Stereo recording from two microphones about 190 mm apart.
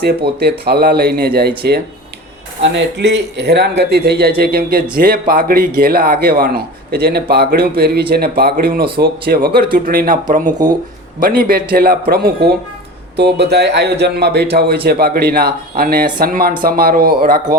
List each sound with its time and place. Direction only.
0.6 s speech: 60° right (ahead or behind)
2.6 s a man's voice: 70° right (ahead or behind); by 17.4 s 50° right (ahead or behind)